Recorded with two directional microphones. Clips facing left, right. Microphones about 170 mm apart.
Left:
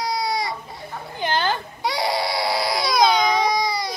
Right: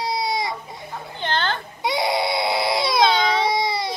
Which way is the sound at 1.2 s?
10° left (ahead or behind).